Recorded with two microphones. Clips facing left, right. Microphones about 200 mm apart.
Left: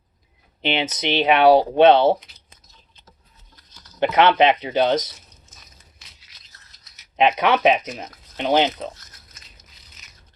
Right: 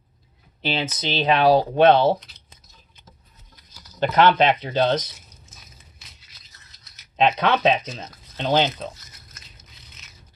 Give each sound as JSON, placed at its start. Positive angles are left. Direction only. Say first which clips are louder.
{"t": 0.6, "sound": "speech", "louder": "left 3 dB", "side_deg": 20}
{"t": 3.5, "sound": "a sound", "louder": "right 1 dB", "side_deg": -10}
{"t": 4.0, "sound": "speech", "louder": "left 1 dB", "side_deg": 20}
{"t": 5.5, "sound": "a sound", "louder": "right 1 dB", "side_deg": 0}
{"t": 7.2, "sound": "speech", "louder": "left 2 dB", "side_deg": 15}
{"t": 8.9, "sound": "biting", "louder": "left 2 dB", "side_deg": 0}